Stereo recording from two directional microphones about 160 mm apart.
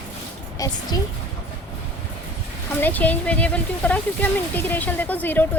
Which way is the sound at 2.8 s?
10° left (ahead or behind).